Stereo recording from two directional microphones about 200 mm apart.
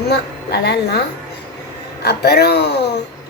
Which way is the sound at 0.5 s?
55° left (ahead or behind).